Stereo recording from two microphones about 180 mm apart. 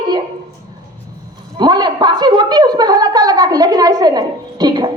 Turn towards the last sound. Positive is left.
turn(degrees=-25)  # may be behind; listen again after turning